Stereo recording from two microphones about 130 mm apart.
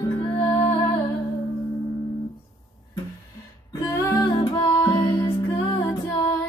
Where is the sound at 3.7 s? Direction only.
25° left (ahead or behind).